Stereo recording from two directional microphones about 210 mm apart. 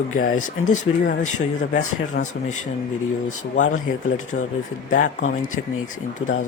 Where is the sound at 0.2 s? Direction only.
40° left (ahead or behind).